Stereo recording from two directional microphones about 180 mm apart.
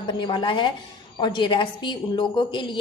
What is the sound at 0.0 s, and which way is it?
A woman's voice, 25° left (ahead or behind).